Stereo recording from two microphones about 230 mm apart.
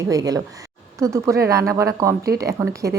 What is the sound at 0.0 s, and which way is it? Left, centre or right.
Speech, centre.